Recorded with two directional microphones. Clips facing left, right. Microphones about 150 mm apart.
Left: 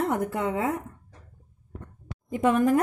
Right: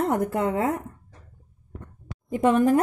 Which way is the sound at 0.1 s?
40° right (ahead or behind).